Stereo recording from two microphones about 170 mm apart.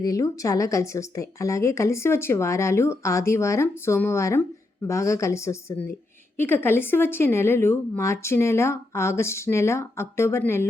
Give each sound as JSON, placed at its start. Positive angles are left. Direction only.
{"t": 0.0, "sound": "speech", "side_deg": 20}